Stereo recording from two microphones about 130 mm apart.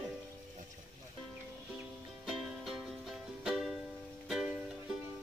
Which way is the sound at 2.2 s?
Centre (ahead or behind).